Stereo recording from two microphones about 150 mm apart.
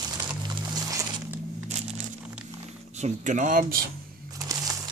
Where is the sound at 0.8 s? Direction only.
20° right (ahead or behind).